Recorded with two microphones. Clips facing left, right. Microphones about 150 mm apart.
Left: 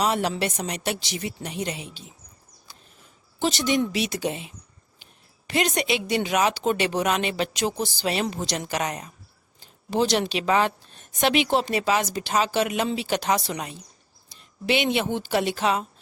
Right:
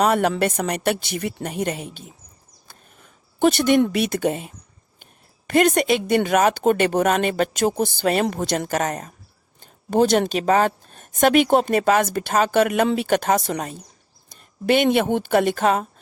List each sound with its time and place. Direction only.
0.0 s a woman's voice: 55° right (ahead or behind)
2.7 s a sound: 55° right (ahead or behind)
3.4 s a woman's voice: 55° right (ahead or behind)